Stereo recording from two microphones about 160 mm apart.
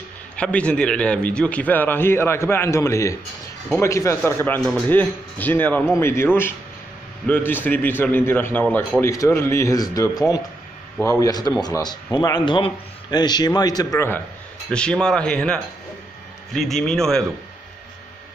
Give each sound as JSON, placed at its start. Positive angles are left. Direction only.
{"t": 0.4, "sound": "a man's voice", "side_deg": 5}
{"t": 13.9, "sound": "a man's voice", "side_deg": 15}